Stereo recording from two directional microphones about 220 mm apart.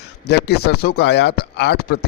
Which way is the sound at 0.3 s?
50° left (ahead or behind).